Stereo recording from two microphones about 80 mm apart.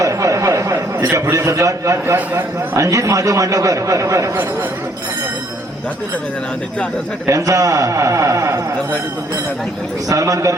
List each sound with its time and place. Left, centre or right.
0.0 s a sound: right
0.9 s a man's voice: right
7.3 s a man's voice: right
10.1 s a man's voice: right